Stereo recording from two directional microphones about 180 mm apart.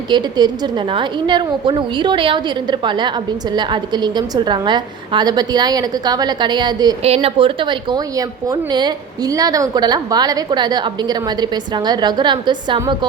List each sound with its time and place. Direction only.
0.1 s a woman's voice: 25° right (ahead or behind)
7.0 s a woman's voice: 35° right (ahead or behind)